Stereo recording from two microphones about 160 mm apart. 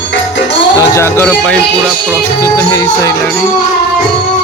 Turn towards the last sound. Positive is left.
turn(degrees=20)  # may be behind; listen again after turning